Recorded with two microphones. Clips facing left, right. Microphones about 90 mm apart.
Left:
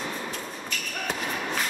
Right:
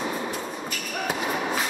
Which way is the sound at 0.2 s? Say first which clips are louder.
Right 4 dB; 15° right (ahead or behind).